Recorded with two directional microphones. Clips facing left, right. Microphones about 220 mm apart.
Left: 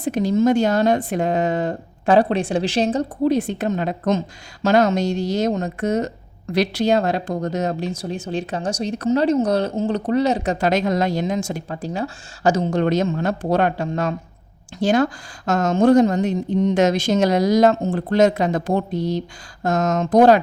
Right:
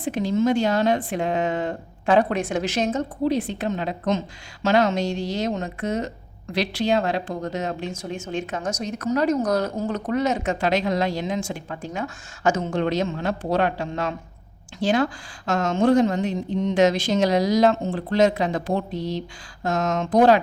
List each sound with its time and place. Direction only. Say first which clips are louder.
0.0 s speech: left 4 dB; 40° left (ahead or behind)
3.2 s speech: left 4 dB; 45° left (ahead or behind)